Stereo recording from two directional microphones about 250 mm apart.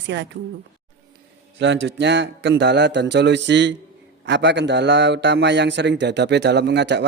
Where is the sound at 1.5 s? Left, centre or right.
Right.